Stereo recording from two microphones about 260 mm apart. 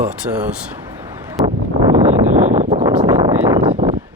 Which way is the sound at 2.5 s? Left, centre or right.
Right.